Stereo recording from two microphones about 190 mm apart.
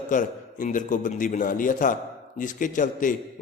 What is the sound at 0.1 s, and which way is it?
A man's voice, 45° left (ahead or behind).